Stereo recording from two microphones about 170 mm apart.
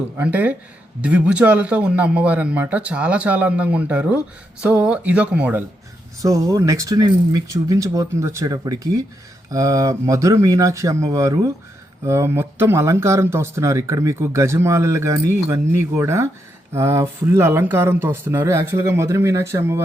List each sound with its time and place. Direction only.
0.2 s speech: 10° right (ahead or behind)
6.2 s speech: 20° right (ahead or behind)